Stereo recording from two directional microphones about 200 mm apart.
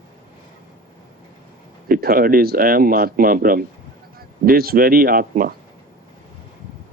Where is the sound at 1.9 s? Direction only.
50° right (ahead or behind).